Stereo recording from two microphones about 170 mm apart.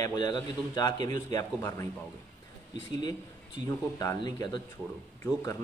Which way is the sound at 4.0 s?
20° left (ahead or behind).